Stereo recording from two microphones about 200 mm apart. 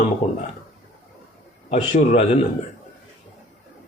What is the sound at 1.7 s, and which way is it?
Speech, 30° left (ahead or behind).